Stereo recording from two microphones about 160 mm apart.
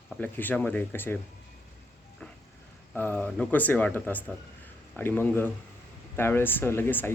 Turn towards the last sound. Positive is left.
turn(degrees=15)  # may be behind; listen again after turning